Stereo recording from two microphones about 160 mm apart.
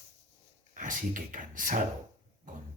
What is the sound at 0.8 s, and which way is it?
A man's voice, 55° right (ahead or behind).